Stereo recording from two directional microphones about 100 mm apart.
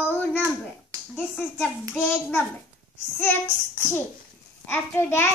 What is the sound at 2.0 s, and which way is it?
Speech, 15° left (ahead or behind).